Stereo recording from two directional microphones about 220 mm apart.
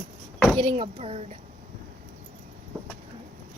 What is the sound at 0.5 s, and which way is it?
Speech, 25° right (ahead or behind).